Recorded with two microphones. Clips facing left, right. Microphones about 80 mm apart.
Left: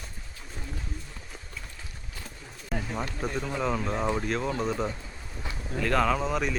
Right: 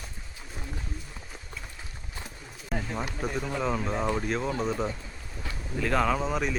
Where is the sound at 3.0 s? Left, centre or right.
Centre.